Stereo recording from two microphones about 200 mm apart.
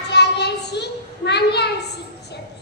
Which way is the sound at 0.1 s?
55° left (ahead or behind).